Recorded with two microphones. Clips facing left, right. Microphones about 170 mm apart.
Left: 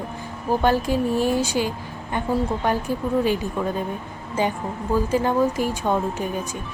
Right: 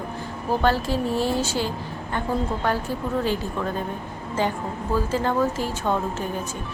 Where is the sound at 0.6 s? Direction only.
15° left (ahead or behind).